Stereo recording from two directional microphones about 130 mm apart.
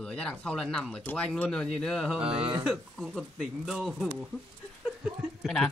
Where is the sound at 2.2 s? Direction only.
45° right (ahead or behind).